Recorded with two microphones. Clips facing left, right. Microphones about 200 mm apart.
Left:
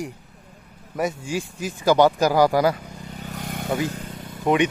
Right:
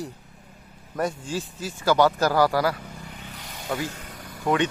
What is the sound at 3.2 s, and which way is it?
Vehicle, 45° left (ahead or behind).